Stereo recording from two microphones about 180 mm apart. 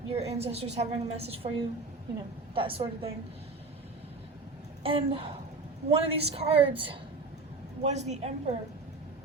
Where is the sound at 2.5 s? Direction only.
30° right (ahead or behind).